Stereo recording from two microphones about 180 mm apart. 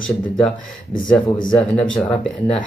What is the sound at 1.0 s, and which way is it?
Speech, 5° left (ahead or behind).